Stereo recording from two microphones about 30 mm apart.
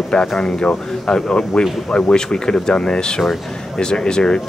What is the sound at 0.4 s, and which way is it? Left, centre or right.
Speech, left.